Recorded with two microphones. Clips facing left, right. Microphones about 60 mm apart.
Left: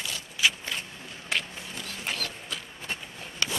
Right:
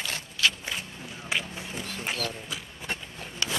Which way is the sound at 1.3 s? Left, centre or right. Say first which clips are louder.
Even; centre.